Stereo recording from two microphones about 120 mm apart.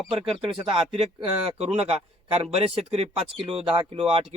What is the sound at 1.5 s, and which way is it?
A man's voice, 60° right (ahead or behind).